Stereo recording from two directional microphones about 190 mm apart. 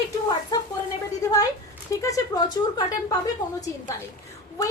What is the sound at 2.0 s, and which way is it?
A woman's voice, 20° left (ahead or behind).